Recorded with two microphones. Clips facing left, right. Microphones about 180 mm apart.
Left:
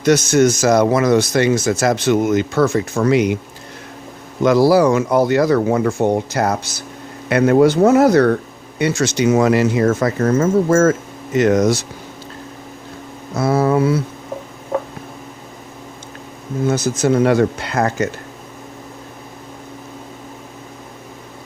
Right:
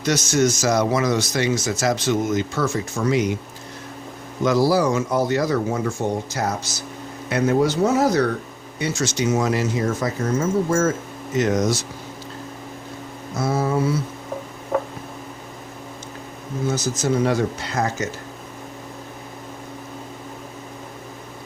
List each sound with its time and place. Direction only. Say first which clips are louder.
0.0 s speech: left 6 dB; 55° left (ahead or behind)
4.4 s speech: left 6 dB; 65° left (ahead or behind)
13.3 s speech: left 6 dB; 65° left (ahead or behind)
16.6 s speech: left 6 dB; 60° left (ahead or behind)